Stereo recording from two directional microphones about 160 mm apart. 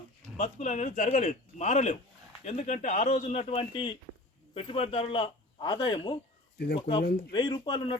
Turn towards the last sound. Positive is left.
turn(degrees=30)  # may be behind; listen again after turning